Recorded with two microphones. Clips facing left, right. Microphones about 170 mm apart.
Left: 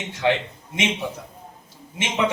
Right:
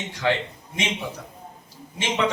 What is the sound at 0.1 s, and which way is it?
Speech, 25° left (ahead or behind).